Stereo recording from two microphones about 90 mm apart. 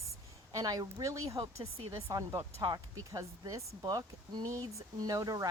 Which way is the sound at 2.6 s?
50° right (ahead or behind).